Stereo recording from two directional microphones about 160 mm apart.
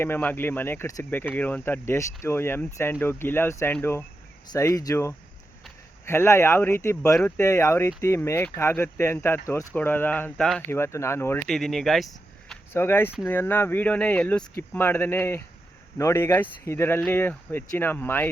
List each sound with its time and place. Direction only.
0.0 s speech: 10° left (ahead or behind)
10.7 s speech: 15° left (ahead or behind)
11.4 s speech: centre (ahead or behind)
12.7 s speech: 15° left (ahead or behind)